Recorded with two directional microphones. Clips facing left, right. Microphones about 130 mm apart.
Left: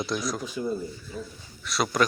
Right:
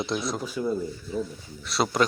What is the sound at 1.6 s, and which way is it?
Speech, 30° right (ahead or behind).